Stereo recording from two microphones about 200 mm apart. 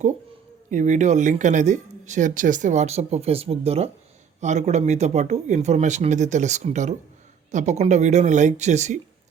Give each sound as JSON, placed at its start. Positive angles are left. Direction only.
{"t": 0.7, "sound": "speech", "side_deg": -35}